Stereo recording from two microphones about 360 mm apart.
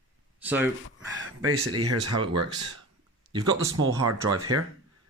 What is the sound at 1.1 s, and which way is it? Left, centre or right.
Speech, right.